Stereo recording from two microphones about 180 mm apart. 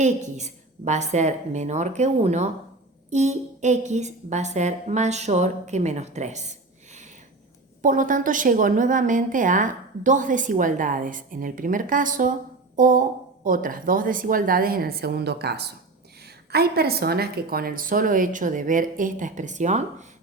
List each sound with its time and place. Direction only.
0.3 s a woman's voice: 40° right (ahead or behind)